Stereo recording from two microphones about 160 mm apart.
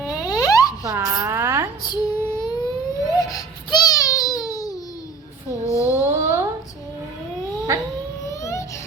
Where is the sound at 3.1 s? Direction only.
20° left (ahead or behind).